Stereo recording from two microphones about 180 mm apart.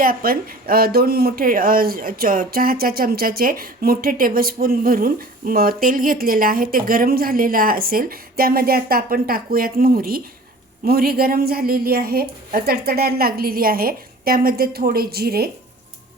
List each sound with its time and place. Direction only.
0.0 s speech: 55° right (ahead or behind)